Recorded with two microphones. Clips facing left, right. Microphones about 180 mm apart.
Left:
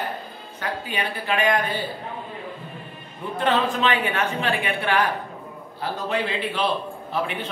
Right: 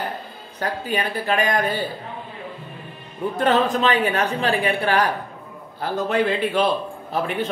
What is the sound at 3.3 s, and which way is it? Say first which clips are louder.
Speech: right 3 dB; 45° right (ahead or behind).